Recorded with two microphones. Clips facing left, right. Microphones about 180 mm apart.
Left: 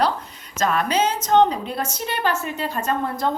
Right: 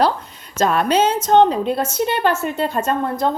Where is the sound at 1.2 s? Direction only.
25° right (ahead or behind).